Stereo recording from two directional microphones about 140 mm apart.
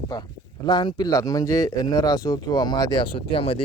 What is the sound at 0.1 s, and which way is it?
Speech, 30° left (ahead or behind).